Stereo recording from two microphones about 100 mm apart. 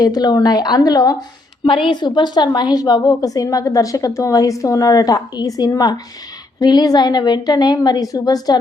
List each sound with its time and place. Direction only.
0.0 s a woman's voice: 40° left (ahead or behind)
1.6 s a woman's voice: 55° left (ahead or behind); by 8.5 s 40° left (ahead or behind)